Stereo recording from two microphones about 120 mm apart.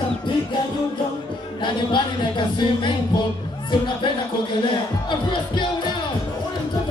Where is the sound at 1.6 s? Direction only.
40° left (ahead or behind).